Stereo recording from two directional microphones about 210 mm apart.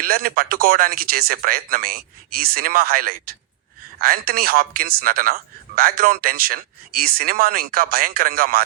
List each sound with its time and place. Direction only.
0.0 s speech: 45° right (ahead or behind)